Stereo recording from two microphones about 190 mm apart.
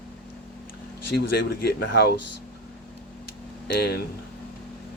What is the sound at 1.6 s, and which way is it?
Speech, 55° left (ahead or behind).